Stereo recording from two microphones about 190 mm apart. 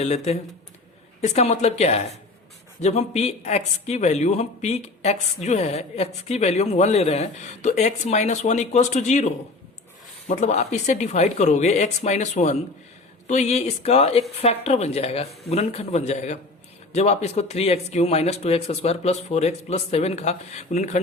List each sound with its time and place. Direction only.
0.0 s speech: 35° left (ahead or behind)